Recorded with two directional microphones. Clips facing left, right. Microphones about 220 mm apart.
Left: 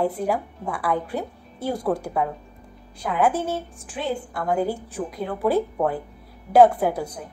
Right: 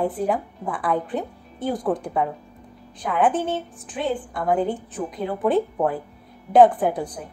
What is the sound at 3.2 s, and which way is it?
A woman's voice, centre (ahead or behind).